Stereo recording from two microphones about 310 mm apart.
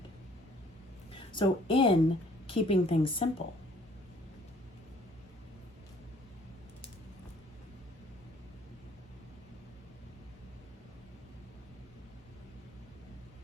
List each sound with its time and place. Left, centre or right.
1.3 s a woman's voice: centre